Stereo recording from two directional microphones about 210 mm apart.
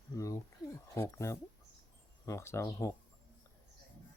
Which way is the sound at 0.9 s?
15° left (ahead or behind).